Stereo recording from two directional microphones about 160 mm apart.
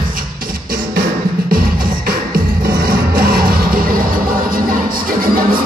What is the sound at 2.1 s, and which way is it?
Music, 65° right (ahead or behind).